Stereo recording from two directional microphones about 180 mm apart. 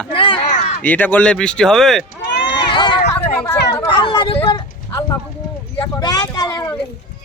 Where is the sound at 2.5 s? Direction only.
25° left (ahead or behind).